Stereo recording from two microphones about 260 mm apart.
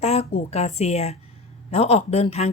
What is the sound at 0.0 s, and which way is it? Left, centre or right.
A woman's voice, left.